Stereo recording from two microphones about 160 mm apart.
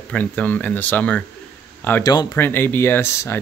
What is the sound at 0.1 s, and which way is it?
Speech, 10° left (ahead or behind).